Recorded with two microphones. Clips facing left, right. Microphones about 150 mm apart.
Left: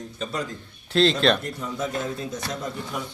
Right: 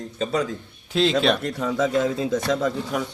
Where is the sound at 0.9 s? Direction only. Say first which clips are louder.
Even; 10° right (ahead or behind).